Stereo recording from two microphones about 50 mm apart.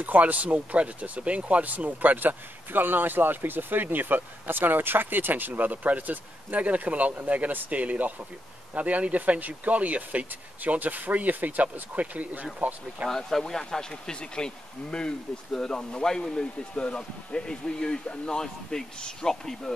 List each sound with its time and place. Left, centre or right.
0.0 s speech: right
13.1 s speech: centre